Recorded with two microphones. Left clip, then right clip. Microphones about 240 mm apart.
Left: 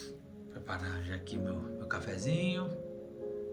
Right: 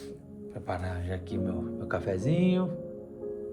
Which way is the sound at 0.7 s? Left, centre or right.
Right.